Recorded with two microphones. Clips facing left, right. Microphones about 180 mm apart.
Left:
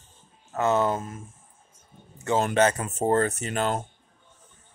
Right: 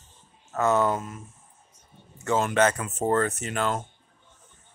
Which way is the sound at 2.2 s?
30° left (ahead or behind).